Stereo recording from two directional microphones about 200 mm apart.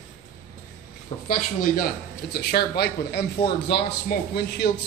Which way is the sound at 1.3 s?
45° left (ahead or behind).